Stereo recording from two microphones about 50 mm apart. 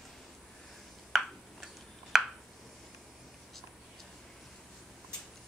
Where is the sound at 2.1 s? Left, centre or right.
Centre.